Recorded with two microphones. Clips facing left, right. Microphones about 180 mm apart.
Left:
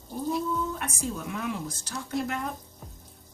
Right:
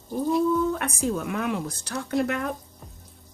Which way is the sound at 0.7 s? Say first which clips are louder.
Right 7 dB; 65° right (ahead or behind).